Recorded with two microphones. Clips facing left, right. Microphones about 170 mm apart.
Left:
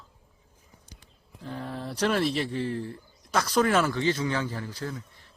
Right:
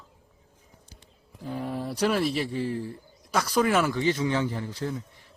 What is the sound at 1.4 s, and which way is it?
Speech, 10° right (ahead or behind).